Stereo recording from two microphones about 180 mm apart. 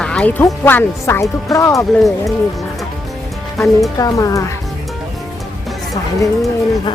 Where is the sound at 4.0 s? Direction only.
20° left (ahead or behind).